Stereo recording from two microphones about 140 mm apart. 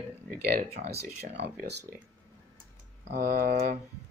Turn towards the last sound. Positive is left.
turn(degrees=-90)